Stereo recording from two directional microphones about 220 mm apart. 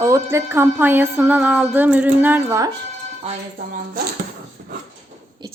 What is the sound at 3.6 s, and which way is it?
Speech, 40° right (ahead or behind).